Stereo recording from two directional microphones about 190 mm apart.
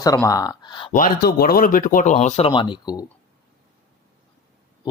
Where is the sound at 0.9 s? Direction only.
50° left (ahead or behind).